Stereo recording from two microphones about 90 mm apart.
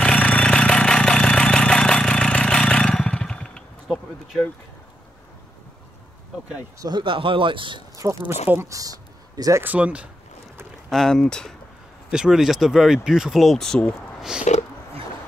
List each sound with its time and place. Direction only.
0.0 s vehicle: 10° left (ahead or behind)
3.8 s bee: 5° right (ahead or behind)
6.8 s speech: 55° right (ahead or behind)
7.9 s speech: 35° right (ahead or behind)
8.3 s speech: 20° right (ahead or behind)
8.6 s speech: 40° right (ahead or behind)
9.6 s speech: 15° right (ahead or behind)
10.9 s speech: 5° left (ahead or behind)
12.1 s speech: 5° right (ahead or behind)